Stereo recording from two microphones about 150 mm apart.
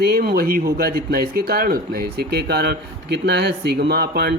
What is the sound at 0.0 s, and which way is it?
Speech, 90° right.